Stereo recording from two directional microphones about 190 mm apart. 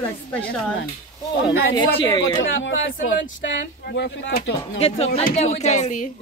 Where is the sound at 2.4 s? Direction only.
80° left.